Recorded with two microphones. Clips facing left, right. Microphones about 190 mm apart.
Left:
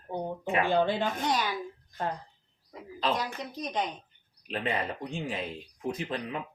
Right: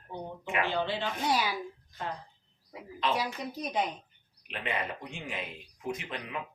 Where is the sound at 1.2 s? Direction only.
10° right (ahead or behind).